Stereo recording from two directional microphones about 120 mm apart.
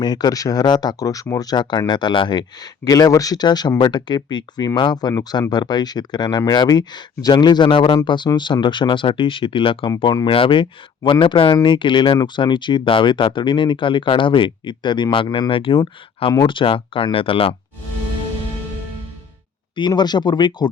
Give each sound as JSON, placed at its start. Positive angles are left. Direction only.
{"t": 0.0, "sound": "speech", "side_deg": 35}
{"t": 19.7, "sound": "speech", "side_deg": 40}